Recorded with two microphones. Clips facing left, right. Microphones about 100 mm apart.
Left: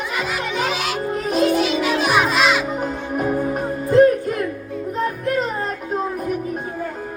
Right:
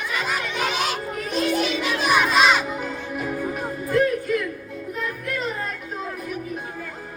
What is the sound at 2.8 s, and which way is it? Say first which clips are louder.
Music: left 6 dB; 45° left (ahead or behind).